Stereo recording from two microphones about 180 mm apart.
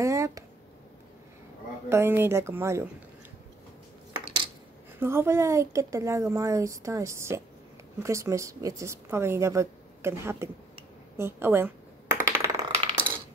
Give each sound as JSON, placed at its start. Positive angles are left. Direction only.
{"t": 0.0, "sound": "a sound", "side_deg": -15}
{"t": 1.9, "sound": "a woman's voice", "side_deg": -15}
{"t": 4.9, "sound": "a woman's voice", "side_deg": -15}
{"t": 11.1, "sound": "coin", "side_deg": -15}